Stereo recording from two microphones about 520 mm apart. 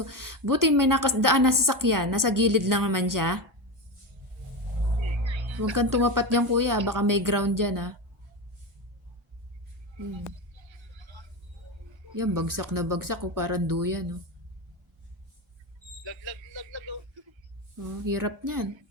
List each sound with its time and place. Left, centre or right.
0.0 s a woman's voice: right
5.2 s music: right
5.7 s a woman's voice: right
10.6 s music: right
12.1 s a woman's voice: right
16.0 s a sound: right
18.0 s a woman's voice: right